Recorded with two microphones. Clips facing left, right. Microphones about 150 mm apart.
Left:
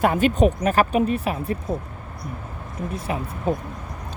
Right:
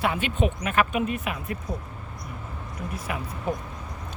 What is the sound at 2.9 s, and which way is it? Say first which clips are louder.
Speech: left 4 dB; 30° left (ahead or behind).